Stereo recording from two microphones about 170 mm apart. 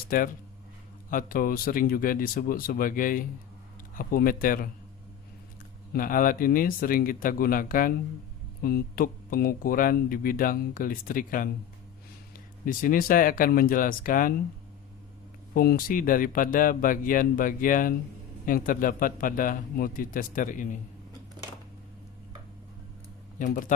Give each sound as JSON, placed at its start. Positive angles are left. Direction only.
{"t": 1.1, "sound": "speech", "side_deg": 55}
{"t": 5.9, "sound": "speech", "side_deg": 55}
{"t": 12.6, "sound": "speech", "side_deg": 55}
{"t": 15.5, "sound": "speech", "side_deg": 60}
{"t": 23.4, "sound": "speech", "side_deg": 50}